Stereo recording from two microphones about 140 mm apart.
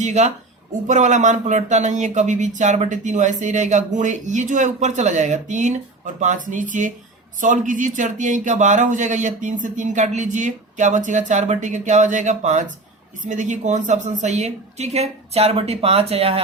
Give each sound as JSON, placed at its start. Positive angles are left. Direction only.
{"t": 0.0, "sound": "a woman's voice", "side_deg": -55}